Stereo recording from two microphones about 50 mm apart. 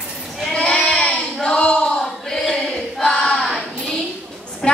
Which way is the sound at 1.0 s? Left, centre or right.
Centre.